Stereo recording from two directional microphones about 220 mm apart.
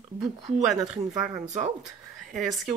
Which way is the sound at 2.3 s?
Centre (ahead or behind).